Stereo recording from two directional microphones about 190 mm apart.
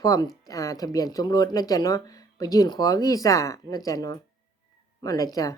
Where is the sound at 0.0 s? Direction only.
20° left (ahead or behind).